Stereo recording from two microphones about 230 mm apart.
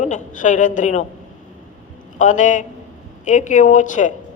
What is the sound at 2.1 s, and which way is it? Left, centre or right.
A woman's voice, left.